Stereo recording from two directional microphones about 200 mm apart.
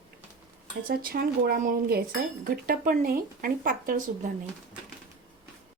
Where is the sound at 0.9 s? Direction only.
50° right (ahead or behind).